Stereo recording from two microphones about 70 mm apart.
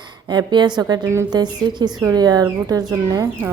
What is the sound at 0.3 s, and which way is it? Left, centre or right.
A woman's voice, right.